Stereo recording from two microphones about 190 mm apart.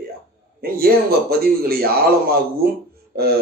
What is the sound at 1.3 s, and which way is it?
Speech, 55° right (ahead or behind).